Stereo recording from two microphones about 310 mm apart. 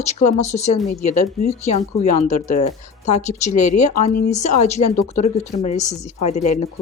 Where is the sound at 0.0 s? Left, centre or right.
Left.